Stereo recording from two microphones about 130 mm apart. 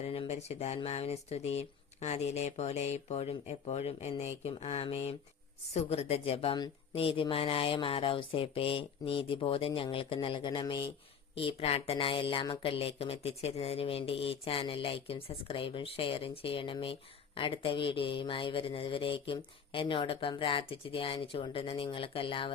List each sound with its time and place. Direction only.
0.0 s speech: 50° left (ahead or behind); by 10.9 s 35° left (ahead or behind)
11.3 s speech: 45° left (ahead or behind)